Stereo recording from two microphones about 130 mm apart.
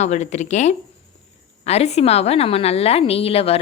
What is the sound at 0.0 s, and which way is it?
Speech, 60° left (ahead or behind).